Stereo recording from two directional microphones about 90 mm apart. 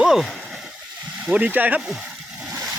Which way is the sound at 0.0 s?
5° right (ahead or behind).